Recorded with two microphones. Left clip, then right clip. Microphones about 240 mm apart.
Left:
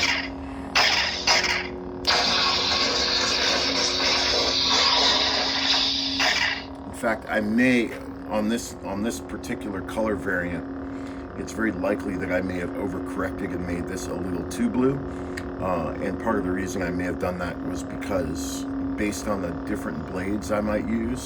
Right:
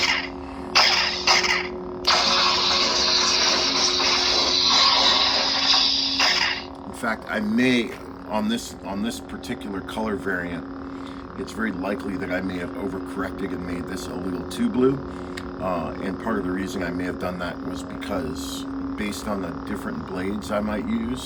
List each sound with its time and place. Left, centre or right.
0.0 s a sound: centre
0.7 s music: centre
7.0 s a man's voice: centre
11.6 s a man's voice: centre
15.6 s a man's voice: centre